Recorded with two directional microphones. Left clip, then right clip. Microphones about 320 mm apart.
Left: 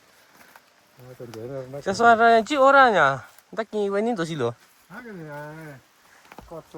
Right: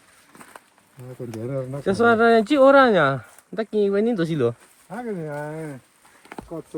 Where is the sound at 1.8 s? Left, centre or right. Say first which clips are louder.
Left 1 dB; centre.